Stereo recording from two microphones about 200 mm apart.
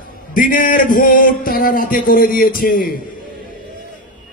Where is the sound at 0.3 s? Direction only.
45° left (ahead or behind).